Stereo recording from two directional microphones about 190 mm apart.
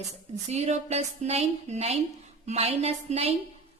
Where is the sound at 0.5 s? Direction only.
35° right (ahead or behind).